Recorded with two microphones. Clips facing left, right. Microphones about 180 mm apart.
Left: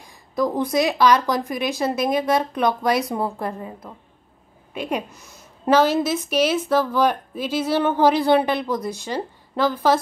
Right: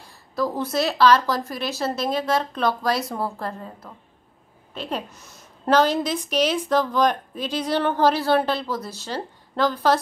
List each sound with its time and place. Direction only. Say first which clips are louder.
0.0 s speech: left 3 dB; 15° left (ahead or behind)